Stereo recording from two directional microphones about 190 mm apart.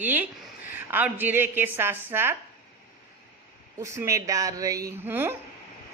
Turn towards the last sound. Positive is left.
turn(degrees=-10)  # may be behind; listen again after turning